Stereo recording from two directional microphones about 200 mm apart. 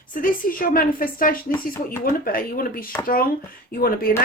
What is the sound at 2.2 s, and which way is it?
Speech, 45° left (ahead or behind).